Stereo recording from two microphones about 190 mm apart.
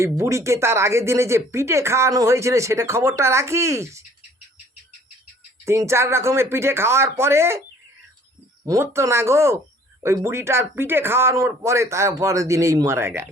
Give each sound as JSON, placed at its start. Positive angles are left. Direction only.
{"t": 0.0, "sound": "speech", "side_deg": -15}
{"t": 5.6, "sound": "speech", "side_deg": -15}
{"t": 8.6, "sound": "speech", "side_deg": -15}